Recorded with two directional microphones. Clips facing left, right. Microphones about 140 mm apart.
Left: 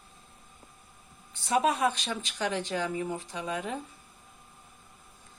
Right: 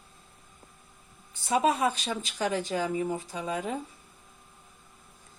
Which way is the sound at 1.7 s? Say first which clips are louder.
Right 1 dB; centre (ahead or behind).